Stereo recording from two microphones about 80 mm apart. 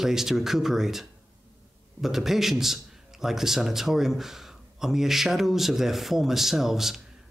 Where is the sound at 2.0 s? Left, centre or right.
Centre.